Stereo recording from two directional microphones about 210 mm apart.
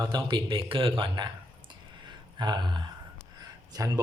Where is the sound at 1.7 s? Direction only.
20° right (ahead or behind).